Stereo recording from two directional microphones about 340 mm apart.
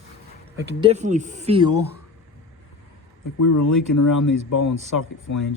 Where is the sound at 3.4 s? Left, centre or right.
Left.